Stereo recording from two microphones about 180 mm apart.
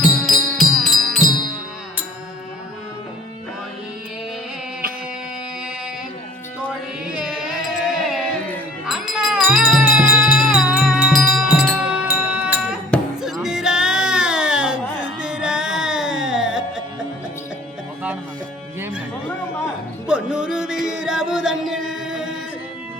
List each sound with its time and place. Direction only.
0.0 s music: centre (ahead or behind)
7.8 s music: centre (ahead or behind)
18.8 s music: 5° right (ahead or behind)